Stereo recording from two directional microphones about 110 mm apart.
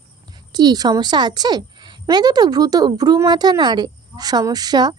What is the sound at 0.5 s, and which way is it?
Speech, 35° right (ahead or behind).